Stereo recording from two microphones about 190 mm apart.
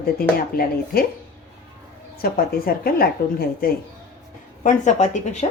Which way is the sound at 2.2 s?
50° left (ahead or behind).